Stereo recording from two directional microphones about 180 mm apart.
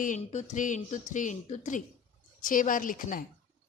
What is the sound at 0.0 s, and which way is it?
Speech, 45° left (ahead or behind).